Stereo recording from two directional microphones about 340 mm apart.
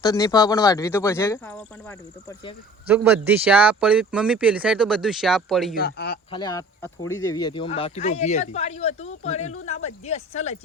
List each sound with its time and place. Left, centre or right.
0.0 s speech: centre
5.7 s speech: left
6.3 s speech: centre